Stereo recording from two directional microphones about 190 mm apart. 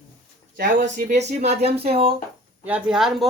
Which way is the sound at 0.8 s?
60° right (ahead or behind).